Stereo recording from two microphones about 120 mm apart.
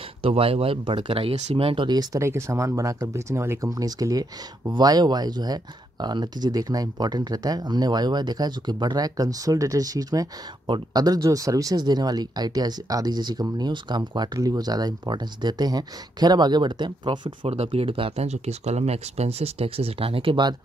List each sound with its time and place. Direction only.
0.2 s speech: 50° right (ahead or behind)
1.9 s speech: 35° right (ahead or behind)
2.2 s speech: 25° right (ahead or behind); by 17.5 s 40° right (ahead or behind)
17.5 s speech: 55° right (ahead or behind)